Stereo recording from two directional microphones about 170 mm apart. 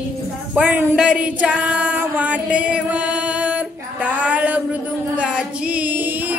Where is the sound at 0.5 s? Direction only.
10° right (ahead or behind).